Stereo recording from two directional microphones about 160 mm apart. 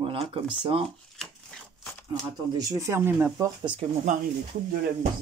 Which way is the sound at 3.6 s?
30° right (ahead or behind).